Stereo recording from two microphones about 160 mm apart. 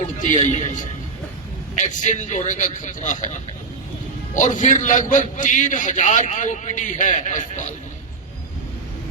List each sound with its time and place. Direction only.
0.2 s a man's voice: 45° left (ahead or behind)
1.8 s a man's voice: 50° left (ahead or behind)
4.4 s a man's voice: 50° left (ahead or behind)